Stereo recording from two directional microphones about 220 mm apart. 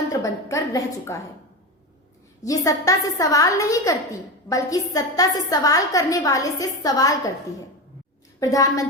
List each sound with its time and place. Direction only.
0.1 s a woman's voice: 15° left (ahead or behind)
2.4 s a woman's voice: 15° left (ahead or behind)
8.4 s a woman's voice: 15° left (ahead or behind)